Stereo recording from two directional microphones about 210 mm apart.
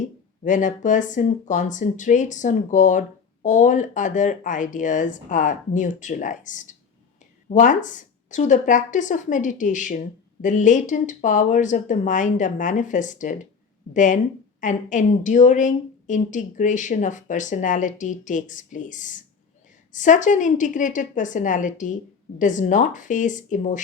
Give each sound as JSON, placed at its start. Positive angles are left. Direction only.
{"t": 0.0, "sound": "a woman's voice", "side_deg": 35}